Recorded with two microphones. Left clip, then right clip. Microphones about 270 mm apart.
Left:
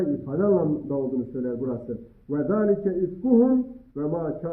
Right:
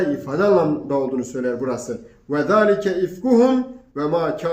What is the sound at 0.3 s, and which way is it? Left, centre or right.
Mantra, right.